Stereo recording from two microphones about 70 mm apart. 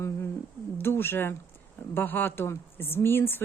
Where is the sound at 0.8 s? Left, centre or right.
Left.